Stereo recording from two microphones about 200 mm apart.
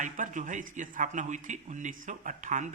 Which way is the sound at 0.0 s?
40° right (ahead or behind).